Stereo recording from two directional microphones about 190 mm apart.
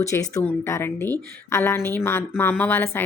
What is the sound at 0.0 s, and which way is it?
Speech, 15° left (ahead or behind).